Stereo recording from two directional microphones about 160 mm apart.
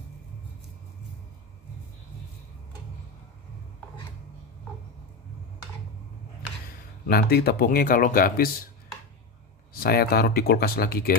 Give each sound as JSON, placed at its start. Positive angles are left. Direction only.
{"t": 7.1, "sound": "speech", "side_deg": 75}
{"t": 9.8, "sound": "speech", "side_deg": 75}